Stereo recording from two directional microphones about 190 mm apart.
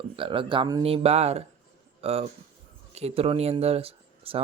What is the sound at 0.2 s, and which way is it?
Speech, 25° right (ahead or behind).